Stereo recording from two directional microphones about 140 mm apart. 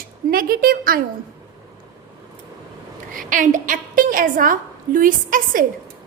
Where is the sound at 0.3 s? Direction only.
90° right.